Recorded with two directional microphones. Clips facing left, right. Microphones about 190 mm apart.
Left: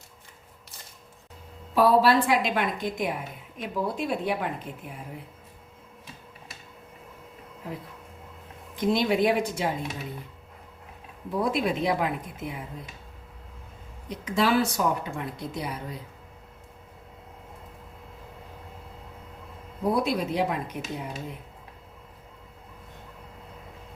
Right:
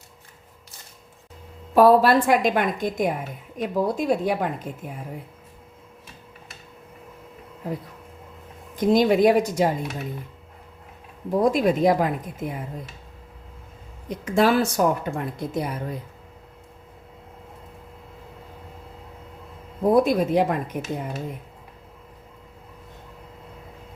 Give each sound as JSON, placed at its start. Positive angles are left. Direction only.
{"t": 1.7, "sound": "speech", "side_deg": -50}
{"t": 8.7, "sound": "speech", "side_deg": -45}
{"t": 11.3, "sound": "speech", "side_deg": -45}
{"t": 14.1, "sound": "speech", "side_deg": -50}
{"t": 19.9, "sound": "speech", "side_deg": -50}